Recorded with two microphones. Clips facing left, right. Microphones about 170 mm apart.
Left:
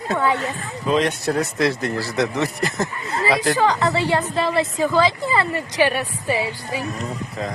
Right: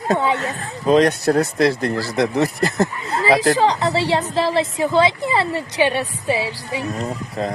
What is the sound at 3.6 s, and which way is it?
A woman's voice, 25° right (ahead or behind).